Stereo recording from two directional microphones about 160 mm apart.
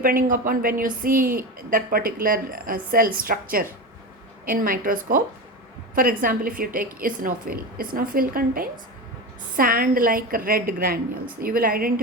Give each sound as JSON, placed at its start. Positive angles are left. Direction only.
{"t": 0.0, "sound": "a woman's voice", "side_deg": -60}